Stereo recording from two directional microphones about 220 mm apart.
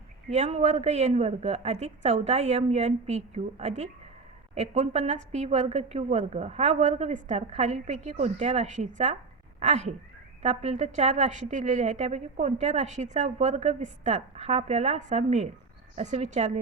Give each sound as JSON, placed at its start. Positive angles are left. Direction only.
{"t": 0.3, "sound": "a woman's voice", "side_deg": -30}